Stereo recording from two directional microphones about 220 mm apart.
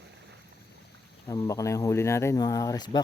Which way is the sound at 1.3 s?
15° left (ahead or behind).